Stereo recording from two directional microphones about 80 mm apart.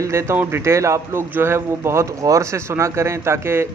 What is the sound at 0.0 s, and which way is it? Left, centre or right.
Speech, right.